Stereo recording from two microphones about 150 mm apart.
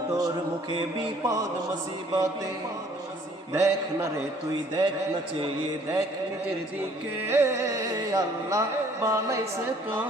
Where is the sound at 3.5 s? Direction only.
20° right (ahead or behind).